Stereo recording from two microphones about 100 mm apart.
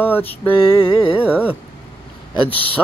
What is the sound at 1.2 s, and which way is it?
Music, 10° right (ahead or behind).